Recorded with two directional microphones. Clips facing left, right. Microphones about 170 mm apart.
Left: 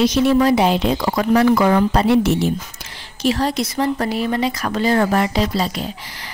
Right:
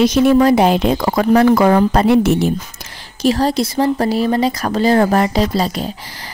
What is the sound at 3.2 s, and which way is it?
Speech, 35° right (ahead or behind).